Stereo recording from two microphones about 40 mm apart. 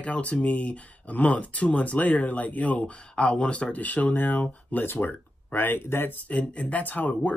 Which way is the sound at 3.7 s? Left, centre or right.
Left.